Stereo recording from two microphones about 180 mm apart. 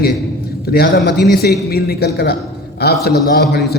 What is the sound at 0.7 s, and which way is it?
A man's voice, 60° left (ahead or behind).